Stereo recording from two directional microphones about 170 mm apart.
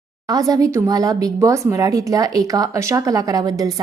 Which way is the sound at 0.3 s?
20° right (ahead or behind).